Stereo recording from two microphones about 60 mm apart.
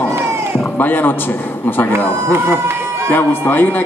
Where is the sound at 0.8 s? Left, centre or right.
Left.